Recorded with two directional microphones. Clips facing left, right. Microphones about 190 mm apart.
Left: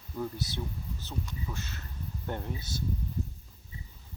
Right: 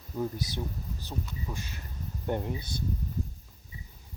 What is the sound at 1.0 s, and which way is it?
Speech, 10° right (ahead or behind).